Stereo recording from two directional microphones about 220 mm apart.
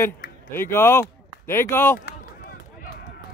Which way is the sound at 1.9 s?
40° left (ahead or behind).